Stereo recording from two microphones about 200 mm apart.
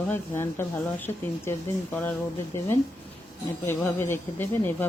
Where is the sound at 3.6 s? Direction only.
10° left (ahead or behind).